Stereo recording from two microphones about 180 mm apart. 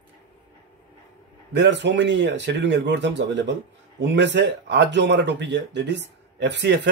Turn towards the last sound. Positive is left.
turn(degrees=-70)  # may be behind; listen again after turning